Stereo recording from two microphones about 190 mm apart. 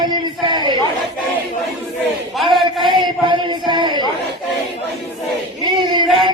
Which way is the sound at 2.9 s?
25° right (ahead or behind).